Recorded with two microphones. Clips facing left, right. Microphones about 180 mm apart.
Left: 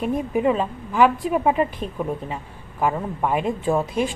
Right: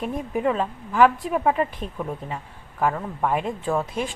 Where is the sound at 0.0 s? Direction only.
5° left (ahead or behind).